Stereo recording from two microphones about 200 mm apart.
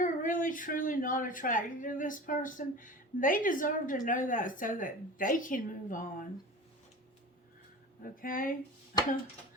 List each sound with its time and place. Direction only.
0.0 s speech: 40° left (ahead or behind)
8.1 s speech: 45° left (ahead or behind)